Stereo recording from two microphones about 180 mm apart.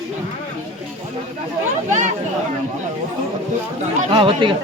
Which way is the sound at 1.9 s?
40° right (ahead or behind).